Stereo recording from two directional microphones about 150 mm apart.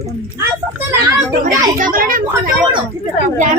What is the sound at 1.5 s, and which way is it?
Speech, 65° right (ahead or behind).